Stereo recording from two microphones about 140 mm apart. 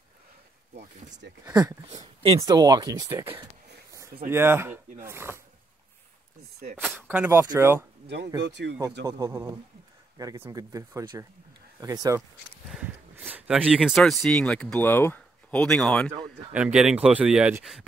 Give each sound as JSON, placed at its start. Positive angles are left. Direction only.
{"t": 2.4, "sound": "speech", "side_deg": -30}
{"t": 7.0, "sound": "speech", "side_deg": -15}
{"t": 12.7, "sound": "speech", "side_deg": -10}
{"t": 16.5, "sound": "speech", "side_deg": -5}